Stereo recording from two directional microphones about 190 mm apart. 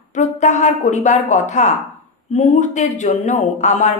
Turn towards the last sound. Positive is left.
turn(degrees=40)  # may be behind; listen again after turning